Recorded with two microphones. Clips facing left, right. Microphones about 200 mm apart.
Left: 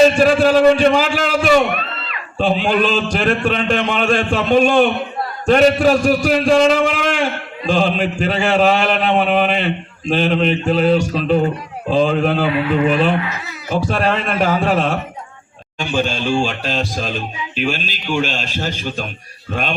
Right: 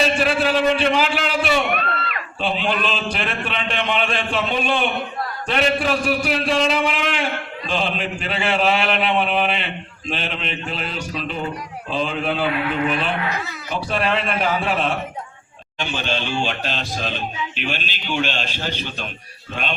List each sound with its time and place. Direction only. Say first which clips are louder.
0.2 s a sound: left 7 dB; 45° left (ahead or behind)
2.4 s speech: left 7 dB; 45° left (ahead or behind)
16.0 s speech: left 7 dB; 45° left (ahead or behind)